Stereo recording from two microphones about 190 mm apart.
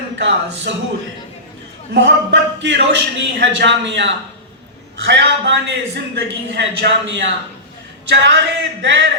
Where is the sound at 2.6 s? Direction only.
65° right (ahead or behind).